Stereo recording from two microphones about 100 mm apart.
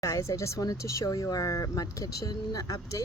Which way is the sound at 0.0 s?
30° left (ahead or behind).